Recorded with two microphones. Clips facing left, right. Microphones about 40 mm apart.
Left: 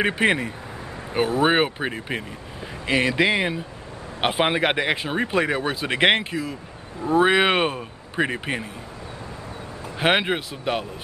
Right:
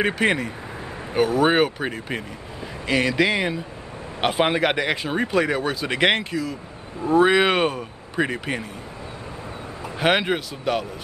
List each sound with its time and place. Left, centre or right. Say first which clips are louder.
0.0 s speech: even; centre
1.1 s a man's voice: right 2 dB; left
1.5 s a man's voice: right 1 dB; centre
10.0 s a man's voice: even; centre